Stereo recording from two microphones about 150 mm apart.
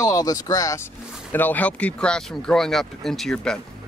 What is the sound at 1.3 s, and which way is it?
Speech, 10° left (ahead or behind).